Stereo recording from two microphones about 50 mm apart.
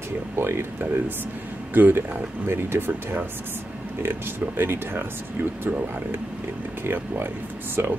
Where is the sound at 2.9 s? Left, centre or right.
Right.